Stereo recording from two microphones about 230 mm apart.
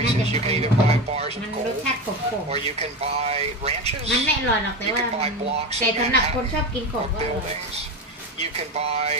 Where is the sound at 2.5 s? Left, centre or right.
Right.